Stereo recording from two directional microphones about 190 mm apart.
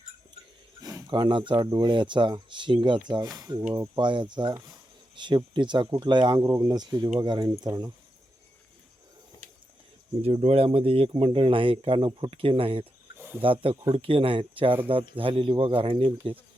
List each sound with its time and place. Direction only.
0.8 s speech: 20° right (ahead or behind)
10.2 s speech: 30° right (ahead or behind)
13.1 s a sound: 15° right (ahead or behind)
13.4 s speech: 30° right (ahead or behind)